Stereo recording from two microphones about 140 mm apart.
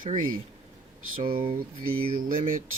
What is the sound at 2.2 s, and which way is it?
Mantra, 80° right.